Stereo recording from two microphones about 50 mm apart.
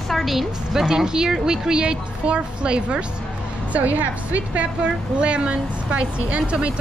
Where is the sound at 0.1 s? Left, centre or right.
Centre.